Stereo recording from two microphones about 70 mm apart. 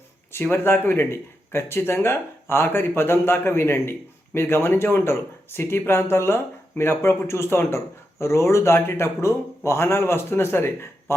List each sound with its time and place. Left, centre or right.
0.5 s speech: left